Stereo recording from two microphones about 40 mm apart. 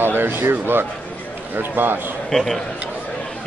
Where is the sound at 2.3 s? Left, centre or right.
Centre.